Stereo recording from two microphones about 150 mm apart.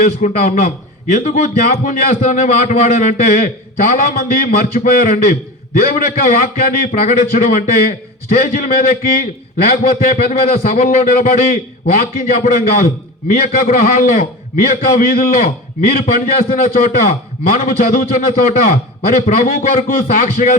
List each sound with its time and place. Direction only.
0.0 s a man's voice: 65° left (ahead or behind)
1.1 s a man's voice: 55° left (ahead or behind)